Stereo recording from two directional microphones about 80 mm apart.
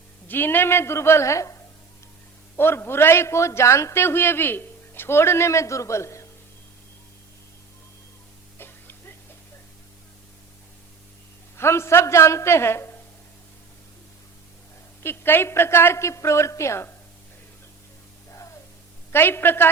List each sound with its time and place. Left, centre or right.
0.3 s a man's voice: left
2.6 s a man's voice: left
8.5 s music: left
11.5 s a man's voice: left
15.0 s a man's voice: left
19.1 s a woman's voice: left